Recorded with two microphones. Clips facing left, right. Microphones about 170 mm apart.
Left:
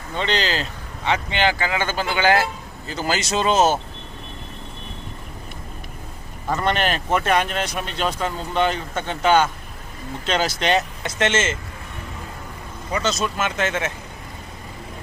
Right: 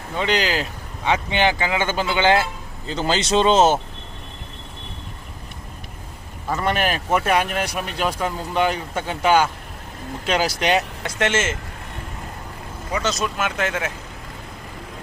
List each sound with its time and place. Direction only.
0.2 s speech: 10° right (ahead or behind); by 3.8 s 25° right (ahead or behind)
6.5 s speech: 5° right (ahead or behind)
12.9 s speech: 5° right (ahead or behind)